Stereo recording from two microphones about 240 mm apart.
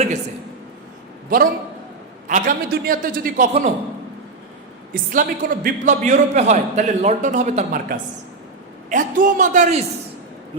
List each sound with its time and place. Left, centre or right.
1.3 s a man's voice: right
5.1 s a man's voice: right